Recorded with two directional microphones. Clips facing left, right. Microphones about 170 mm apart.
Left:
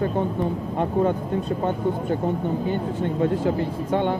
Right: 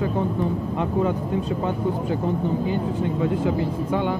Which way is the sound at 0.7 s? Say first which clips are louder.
Left 3 dB; 50° left (ahead or behind).